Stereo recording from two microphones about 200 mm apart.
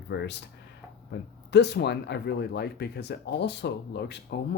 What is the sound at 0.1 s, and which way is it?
Speech, 60° left (ahead or behind).